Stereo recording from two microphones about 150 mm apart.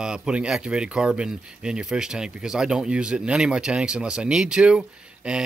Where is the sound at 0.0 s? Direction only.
5° right (ahead or behind).